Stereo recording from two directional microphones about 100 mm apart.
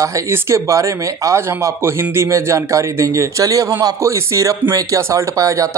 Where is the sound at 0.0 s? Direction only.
30° right (ahead or behind).